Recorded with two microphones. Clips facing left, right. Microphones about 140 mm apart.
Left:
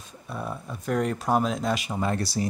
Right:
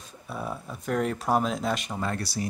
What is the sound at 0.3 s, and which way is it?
Speech, 5° right (ahead or behind).